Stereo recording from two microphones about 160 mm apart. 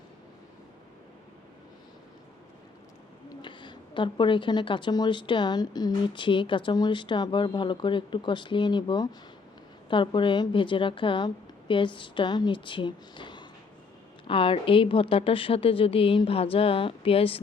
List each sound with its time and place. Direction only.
3.2 s a woman's voice: 30° left (ahead or behind)